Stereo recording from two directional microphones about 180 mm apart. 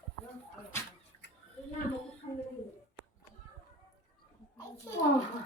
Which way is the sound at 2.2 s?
40° left (ahead or behind).